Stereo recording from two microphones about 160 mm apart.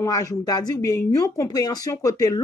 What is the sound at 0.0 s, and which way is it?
Speech, 20° left (ahead or behind).